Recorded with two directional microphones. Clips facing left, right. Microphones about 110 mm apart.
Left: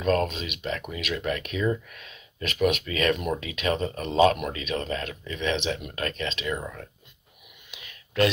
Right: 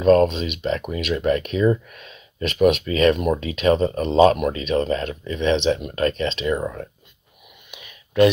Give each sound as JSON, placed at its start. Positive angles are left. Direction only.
{"t": 0.0, "sound": "speech", "side_deg": -30}
{"t": 7.7, "sound": "whispering", "side_deg": -20}